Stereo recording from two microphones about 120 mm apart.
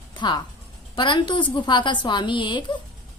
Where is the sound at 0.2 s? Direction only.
40° left (ahead or behind).